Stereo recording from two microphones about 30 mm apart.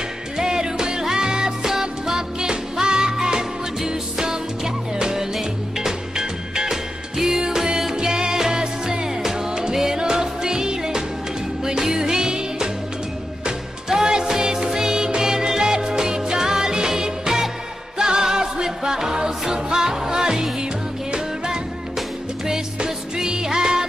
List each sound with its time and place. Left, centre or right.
0.4 s music: right
14.0 s music: right
22.8 s music: right